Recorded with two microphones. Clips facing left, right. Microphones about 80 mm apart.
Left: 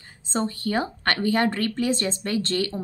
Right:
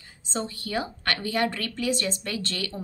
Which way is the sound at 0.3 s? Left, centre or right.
Left.